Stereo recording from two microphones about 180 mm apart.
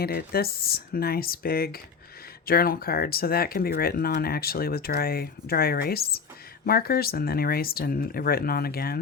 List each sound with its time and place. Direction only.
0.0 s speech: 60° left (ahead or behind)